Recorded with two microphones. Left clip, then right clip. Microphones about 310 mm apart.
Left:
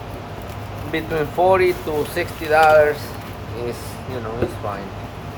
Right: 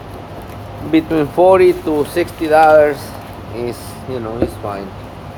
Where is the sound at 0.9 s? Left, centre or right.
Right.